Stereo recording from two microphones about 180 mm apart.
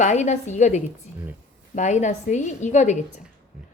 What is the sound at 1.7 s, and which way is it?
A woman's voice, 40° left (ahead or behind).